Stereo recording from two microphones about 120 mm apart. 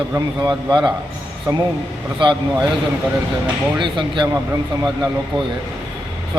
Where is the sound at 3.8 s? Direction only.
40° right (ahead or behind).